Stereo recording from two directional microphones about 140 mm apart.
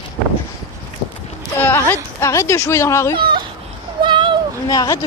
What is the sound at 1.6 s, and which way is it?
Speech, 15° left (ahead or behind).